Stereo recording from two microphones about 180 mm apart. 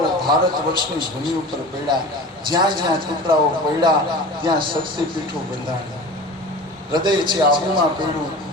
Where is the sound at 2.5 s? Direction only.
25° right (ahead or behind).